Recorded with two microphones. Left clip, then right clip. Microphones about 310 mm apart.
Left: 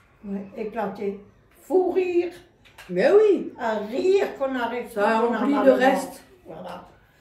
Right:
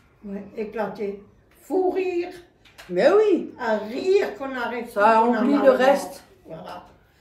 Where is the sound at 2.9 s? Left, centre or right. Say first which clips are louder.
Even; centre.